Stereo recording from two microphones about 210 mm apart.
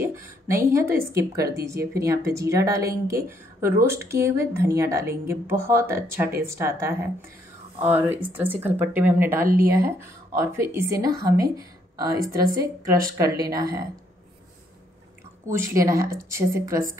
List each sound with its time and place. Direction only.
0.2 s a sound: 45° right (ahead or behind)
0.7 s a woman's voice: 10° right (ahead or behind)
15.4 s a woman's voice: 15° right (ahead or behind)